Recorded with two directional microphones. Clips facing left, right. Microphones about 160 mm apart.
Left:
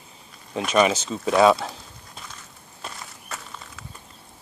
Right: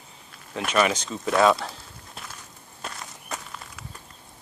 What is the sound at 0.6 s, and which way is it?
Speech, 20° left (ahead or behind).